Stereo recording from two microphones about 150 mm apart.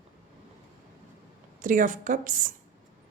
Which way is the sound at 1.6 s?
60° right (ahead or behind).